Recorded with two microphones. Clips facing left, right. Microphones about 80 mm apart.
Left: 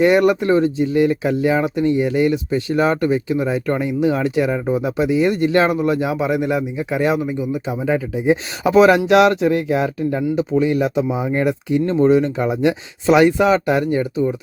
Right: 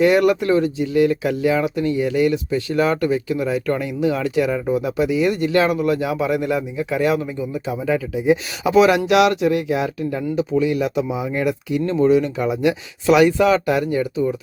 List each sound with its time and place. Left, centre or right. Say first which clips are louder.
0.0 s speech: left 1 dB; left